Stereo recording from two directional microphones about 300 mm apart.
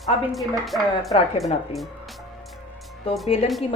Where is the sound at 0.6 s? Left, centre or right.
Centre.